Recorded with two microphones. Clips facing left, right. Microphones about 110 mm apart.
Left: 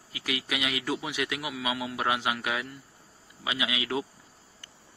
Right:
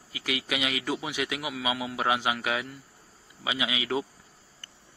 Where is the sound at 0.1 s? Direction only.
Centre (ahead or behind).